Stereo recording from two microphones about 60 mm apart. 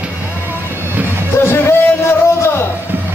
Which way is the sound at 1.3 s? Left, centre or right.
Left.